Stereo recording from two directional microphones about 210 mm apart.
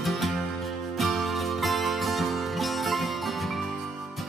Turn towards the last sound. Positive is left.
turn(degrees=0)  # may be behind; listen again after turning